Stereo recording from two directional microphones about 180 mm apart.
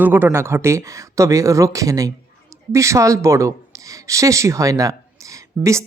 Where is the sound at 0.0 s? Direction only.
10° right (ahead or behind).